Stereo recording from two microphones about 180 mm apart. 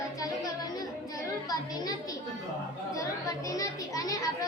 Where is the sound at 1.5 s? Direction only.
20° left (ahead or behind).